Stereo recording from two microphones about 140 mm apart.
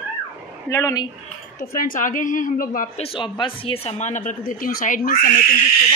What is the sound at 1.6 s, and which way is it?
Speech, 85° left.